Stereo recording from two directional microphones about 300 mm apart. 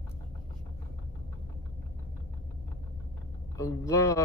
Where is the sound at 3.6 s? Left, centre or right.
Centre.